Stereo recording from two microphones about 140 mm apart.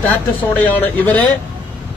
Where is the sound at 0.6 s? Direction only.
10° left (ahead or behind).